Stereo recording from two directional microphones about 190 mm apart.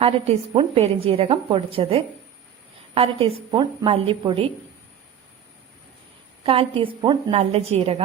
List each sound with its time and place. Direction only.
0.0 s a woman's voice: 30° right (ahead or behind)
6.4 s a woman's voice: 30° right (ahead or behind)